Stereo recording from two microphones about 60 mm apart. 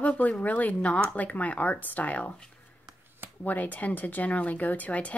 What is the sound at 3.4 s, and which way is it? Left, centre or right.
Speech, left.